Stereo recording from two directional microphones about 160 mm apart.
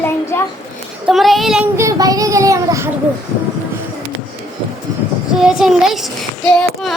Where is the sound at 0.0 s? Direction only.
15° left (ahead or behind).